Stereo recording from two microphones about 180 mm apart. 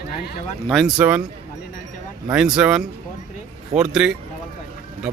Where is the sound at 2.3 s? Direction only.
5° right (ahead or behind).